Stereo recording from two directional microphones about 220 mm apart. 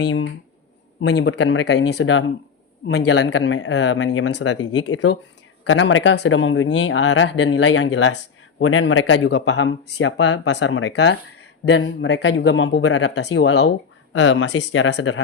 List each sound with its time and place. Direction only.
0.0 s speech: 60° left (ahead or behind)